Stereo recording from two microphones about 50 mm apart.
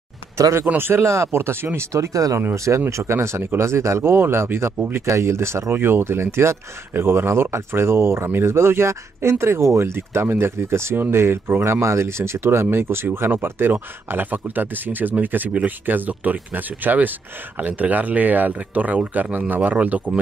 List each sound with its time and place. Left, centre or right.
0.4 s speech: right
0.7 s speech: right
1.0 s speech: right
1.9 s speech: right
2.9 s speech: right
4.7 s speech: right
5.0 s speech: right